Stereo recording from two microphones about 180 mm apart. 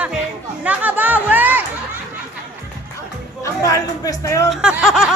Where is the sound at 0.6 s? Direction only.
10° right (ahead or behind).